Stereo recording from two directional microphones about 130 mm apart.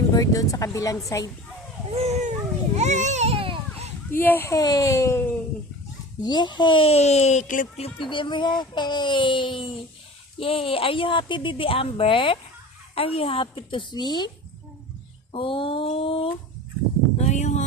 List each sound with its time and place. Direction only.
0.1 s speech: 30° left (ahead or behind)
2.0 s a child's voice: 60° right (ahead or behind)
2.7 s baby cry: 65° right (ahead or behind); by 3.6 s 45° right (ahead or behind)
4.1 s speech: 15° left (ahead or behind)
6.2 s speech: 35° left (ahead or behind); by 7.7 s 85° left
7.8 s speech: 40° left (ahead or behind)
15.3 s speech: 45° left (ahead or behind)
17.2 s a sound: 65° left (ahead or behind)